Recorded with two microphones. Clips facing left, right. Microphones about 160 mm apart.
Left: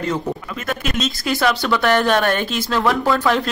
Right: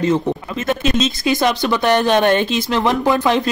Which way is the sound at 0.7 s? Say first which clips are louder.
Right 5 dB; 25° right (ahead or behind).